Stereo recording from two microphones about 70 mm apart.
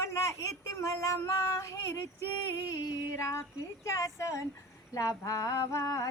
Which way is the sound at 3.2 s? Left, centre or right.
Left.